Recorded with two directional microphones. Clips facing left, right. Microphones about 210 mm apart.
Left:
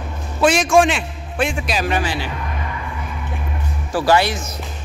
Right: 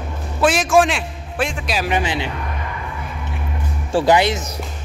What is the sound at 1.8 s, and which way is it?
Speech, 20° right (ahead or behind).